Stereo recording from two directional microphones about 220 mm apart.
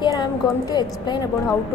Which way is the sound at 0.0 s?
15° left (ahead or behind).